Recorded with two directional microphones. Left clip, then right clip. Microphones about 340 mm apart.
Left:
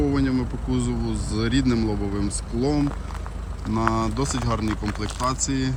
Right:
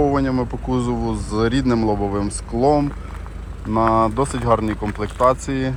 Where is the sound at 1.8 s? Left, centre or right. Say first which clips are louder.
Right 7 dB; right.